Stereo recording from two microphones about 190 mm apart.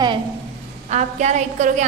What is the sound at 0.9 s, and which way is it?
Speech, 35° right (ahead or behind).